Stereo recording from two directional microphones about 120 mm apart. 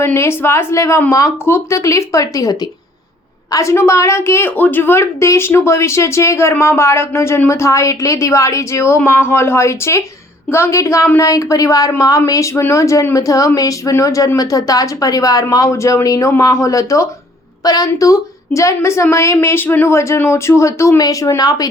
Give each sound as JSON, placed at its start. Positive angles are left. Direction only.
{"t": 0.0, "sound": "a woman's voice", "side_deg": 20}